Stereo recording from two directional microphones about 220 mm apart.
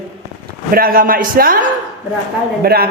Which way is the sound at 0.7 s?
40° right (ahead or behind).